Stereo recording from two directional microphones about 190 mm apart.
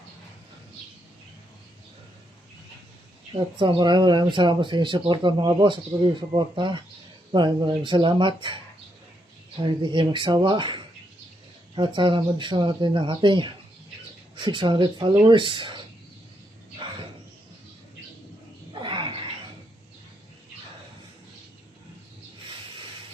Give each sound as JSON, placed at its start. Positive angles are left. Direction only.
{"t": 3.3, "sound": "speech", "side_deg": -25}
{"t": 9.8, "sound": "speech", "side_deg": -25}
{"t": 18.8, "sound": "a sound", "side_deg": -25}